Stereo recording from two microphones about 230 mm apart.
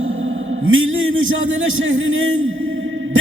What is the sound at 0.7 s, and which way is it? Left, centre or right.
A man's voice, right.